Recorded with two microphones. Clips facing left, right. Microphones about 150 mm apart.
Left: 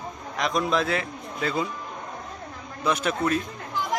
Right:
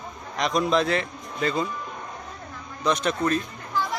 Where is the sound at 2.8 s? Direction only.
10° left (ahead or behind).